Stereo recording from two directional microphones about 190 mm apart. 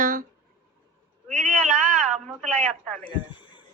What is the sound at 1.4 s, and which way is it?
Speech, 40° right (ahead or behind).